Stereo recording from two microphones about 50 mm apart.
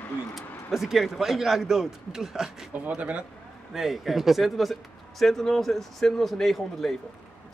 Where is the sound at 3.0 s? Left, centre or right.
Right.